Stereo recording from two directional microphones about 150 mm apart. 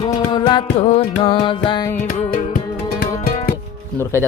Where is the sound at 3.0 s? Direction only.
90° left.